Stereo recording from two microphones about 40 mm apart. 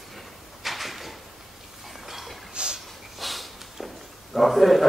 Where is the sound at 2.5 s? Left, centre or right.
Right.